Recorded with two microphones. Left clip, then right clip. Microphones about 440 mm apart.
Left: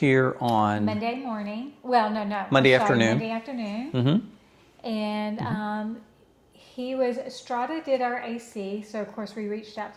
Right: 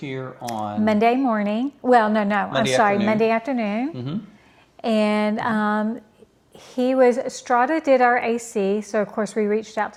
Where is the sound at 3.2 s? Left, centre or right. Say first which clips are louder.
Right 11 dB; right.